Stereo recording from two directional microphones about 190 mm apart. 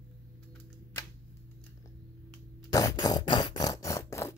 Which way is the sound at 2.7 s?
20° left (ahead or behind).